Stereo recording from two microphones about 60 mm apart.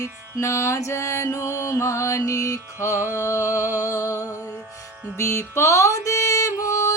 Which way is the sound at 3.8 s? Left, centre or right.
Left.